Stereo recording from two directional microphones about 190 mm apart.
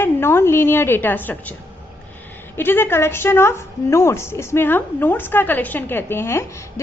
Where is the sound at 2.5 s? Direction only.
10° left (ahead or behind).